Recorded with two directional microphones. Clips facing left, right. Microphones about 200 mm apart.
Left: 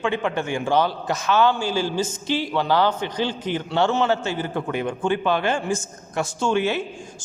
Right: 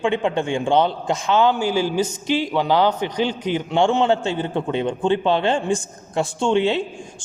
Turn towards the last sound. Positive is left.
turn(degrees=-25)  # may be behind; listen again after turning